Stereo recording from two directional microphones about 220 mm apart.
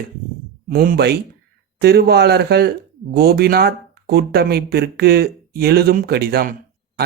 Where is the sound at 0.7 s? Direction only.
45° right (ahead or behind).